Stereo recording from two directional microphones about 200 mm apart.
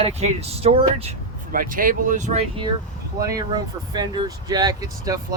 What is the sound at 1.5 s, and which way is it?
Speech, 45° right (ahead or behind).